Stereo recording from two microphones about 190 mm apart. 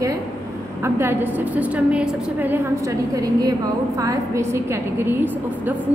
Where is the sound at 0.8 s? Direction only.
10° right (ahead or behind).